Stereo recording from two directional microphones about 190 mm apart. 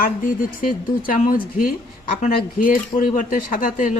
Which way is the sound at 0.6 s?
45° left (ahead or behind).